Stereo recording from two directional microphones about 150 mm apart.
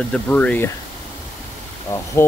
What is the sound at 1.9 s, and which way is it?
Speech, 20° left (ahead or behind).